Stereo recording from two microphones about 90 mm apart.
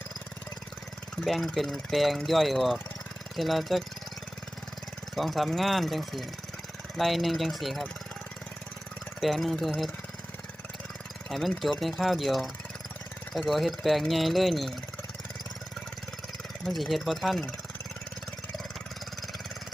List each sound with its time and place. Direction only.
1.2 s speech: centre (ahead or behind)
5.1 s speech: centre (ahead or behind)
9.2 s speech: centre (ahead or behind)
11.3 s speech: centre (ahead or behind)
16.6 s speech: centre (ahead or behind)